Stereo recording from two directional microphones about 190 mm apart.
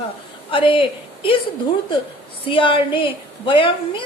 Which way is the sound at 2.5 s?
25° left (ahead or behind).